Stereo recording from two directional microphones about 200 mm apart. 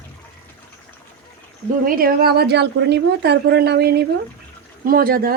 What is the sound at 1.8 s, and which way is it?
A woman's voice, 45° right (ahead or behind).